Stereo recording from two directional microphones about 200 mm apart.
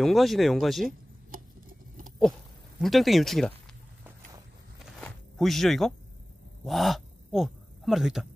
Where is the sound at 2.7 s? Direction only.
Centre (ahead or behind).